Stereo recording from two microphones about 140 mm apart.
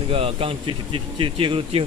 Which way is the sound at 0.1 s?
40° right (ahead or behind).